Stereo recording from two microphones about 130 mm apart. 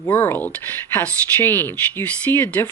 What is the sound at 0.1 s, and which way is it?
Speech, 15° left (ahead or behind).